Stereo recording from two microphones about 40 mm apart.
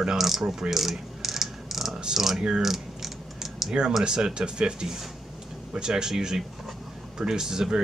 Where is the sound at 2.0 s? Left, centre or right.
Centre.